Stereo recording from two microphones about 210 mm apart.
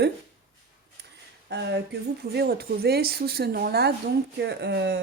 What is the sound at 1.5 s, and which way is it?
Speech, 50° right (ahead or behind).